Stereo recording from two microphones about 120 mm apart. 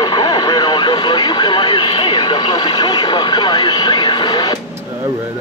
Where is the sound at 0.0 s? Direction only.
35° left (ahead or behind).